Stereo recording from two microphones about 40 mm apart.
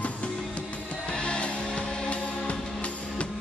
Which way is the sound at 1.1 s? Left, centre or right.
Left.